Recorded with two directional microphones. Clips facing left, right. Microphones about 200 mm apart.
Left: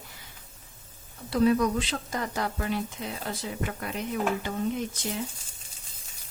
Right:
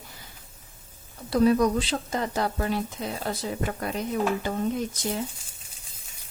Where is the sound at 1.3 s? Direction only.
40° right (ahead or behind).